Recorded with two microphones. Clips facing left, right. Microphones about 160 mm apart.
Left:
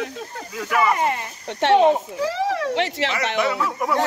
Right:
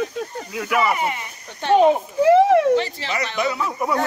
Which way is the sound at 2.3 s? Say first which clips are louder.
Right 12 dB; 55° right (ahead or behind).